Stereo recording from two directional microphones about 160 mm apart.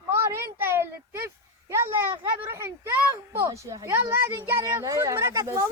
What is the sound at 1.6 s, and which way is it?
Speech, 15° right (ahead or behind).